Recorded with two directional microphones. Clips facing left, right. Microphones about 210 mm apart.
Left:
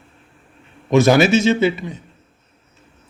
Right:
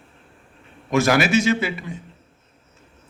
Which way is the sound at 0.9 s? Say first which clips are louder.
Left 5 dB; 25° left (ahead or behind).